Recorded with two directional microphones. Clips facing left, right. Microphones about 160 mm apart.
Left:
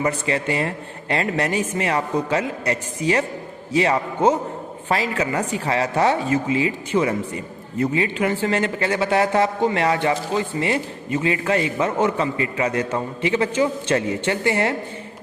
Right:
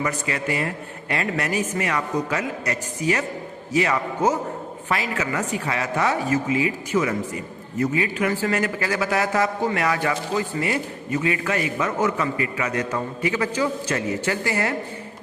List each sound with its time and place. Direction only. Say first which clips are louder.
0.0 s a man's voice: left 4 dB; 30° left (ahead or behind)